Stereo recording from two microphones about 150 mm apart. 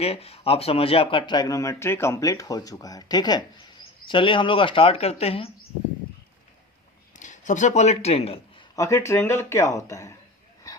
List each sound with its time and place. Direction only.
0.0 s speech: 40° left (ahead or behind)
7.1 s speech: 55° left (ahead or behind); by 8.6 s 40° left (ahead or behind)
8.7 s speech: 20° left (ahead or behind)